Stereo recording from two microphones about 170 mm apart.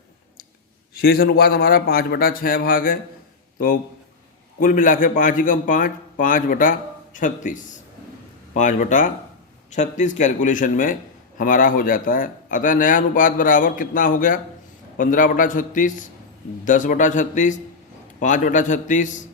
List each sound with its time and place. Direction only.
0.9 s a man's voice: 65° left (ahead or behind)
4.6 s speech: 50° left (ahead or behind)
8.5 s speech: 45° left (ahead or behind)